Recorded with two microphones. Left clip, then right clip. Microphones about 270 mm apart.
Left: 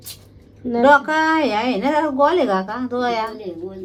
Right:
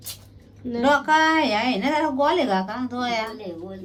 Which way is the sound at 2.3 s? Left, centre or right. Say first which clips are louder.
Left 3 dB; right.